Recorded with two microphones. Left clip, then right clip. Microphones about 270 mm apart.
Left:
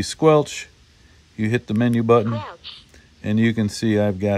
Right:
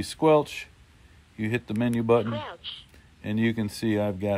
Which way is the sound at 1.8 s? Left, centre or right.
Left.